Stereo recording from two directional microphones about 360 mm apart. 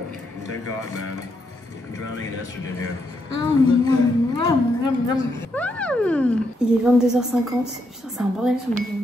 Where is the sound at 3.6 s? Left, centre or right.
Centre.